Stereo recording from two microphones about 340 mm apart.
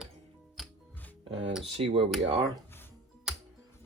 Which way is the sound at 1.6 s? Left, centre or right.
Centre.